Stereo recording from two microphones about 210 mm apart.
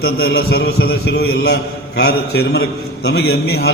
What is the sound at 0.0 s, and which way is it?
A man's voice, 50° left (ahead or behind).